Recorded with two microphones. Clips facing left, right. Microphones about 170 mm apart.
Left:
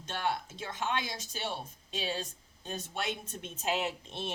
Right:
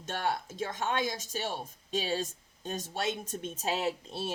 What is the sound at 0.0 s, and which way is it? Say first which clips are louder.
A woman's voice: right 1 dB; 45° right (ahead or behind).